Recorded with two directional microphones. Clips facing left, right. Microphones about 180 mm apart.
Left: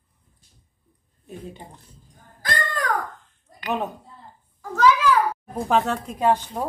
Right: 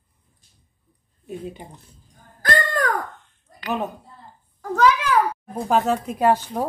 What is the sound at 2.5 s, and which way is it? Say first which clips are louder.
Babbling: right 5 dB; 50° right (ahead or behind).